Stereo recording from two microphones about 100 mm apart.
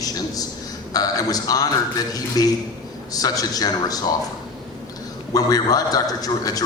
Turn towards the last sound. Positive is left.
turn(degrees=40)  # may be behind; listen again after turning